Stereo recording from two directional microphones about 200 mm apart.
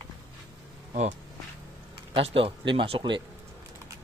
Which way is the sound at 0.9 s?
35° right (ahead or behind).